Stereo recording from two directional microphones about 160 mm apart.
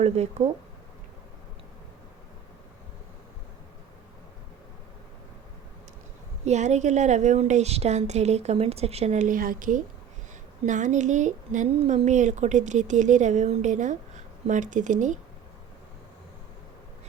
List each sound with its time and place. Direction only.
0.0 s speech: 40° right (ahead or behind)
6.4 s a woman's voice: 45° right (ahead or behind)